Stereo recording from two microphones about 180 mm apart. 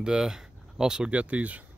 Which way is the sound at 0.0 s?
5° right (ahead or behind).